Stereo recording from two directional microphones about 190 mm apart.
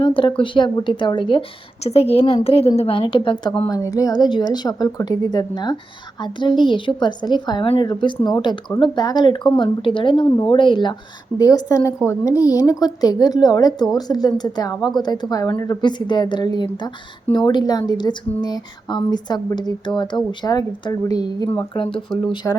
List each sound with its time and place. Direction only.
0.0 s a woman's voice: 25° left (ahead or behind)
22.4 s speech: 10° left (ahead or behind)